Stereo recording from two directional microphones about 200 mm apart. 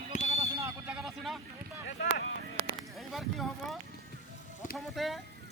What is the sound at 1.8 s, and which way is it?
Speech, 60° left (ahead or behind).